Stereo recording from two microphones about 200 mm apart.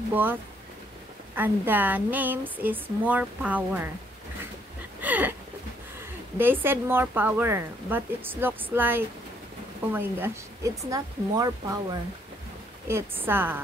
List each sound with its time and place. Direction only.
0.1 s a woman's voice: 10° right (ahead or behind)
5.0 s a sound: 10° right (ahead or behind)
6.3 s a woman's voice: 10° right (ahead or behind)